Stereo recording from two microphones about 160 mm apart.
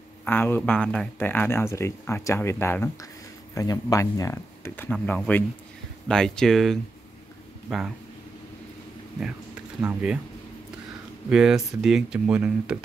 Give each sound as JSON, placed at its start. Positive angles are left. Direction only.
{"t": 0.2, "sound": "speech", "side_deg": 15}
{"t": 9.8, "sound": "speech", "side_deg": -10}
{"t": 11.2, "sound": "speech", "side_deg": -5}